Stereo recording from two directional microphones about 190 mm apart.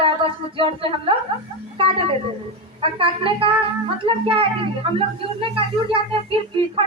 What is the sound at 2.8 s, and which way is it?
A woman's voice, 30° right (ahead or behind).